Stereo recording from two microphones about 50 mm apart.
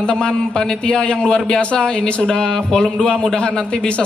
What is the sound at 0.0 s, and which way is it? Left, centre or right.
A man's voice, centre.